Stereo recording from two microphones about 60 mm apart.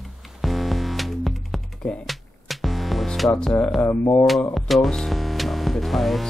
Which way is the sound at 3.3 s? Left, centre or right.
Centre.